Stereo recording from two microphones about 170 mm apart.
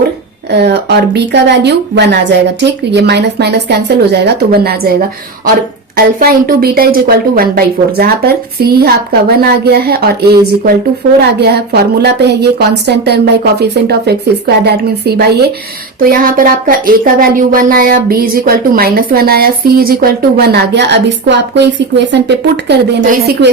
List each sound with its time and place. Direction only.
0.5 s a woman's voice: 80° right
6.1 s a woman's voice: 60° right (ahead or behind)
16.0 s speech: 55° right (ahead or behind); by 23.0 s 85° right
23.1 s a woman's voice: 70° right (ahead or behind)